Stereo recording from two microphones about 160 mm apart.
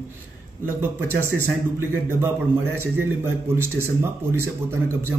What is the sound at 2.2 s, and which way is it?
A man's voice, 15° right (ahead or behind).